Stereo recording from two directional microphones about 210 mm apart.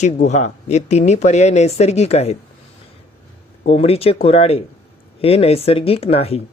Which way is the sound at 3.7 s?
30° left (ahead or behind).